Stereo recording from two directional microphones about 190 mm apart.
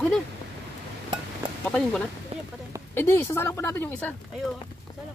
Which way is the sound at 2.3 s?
30° right (ahead or behind).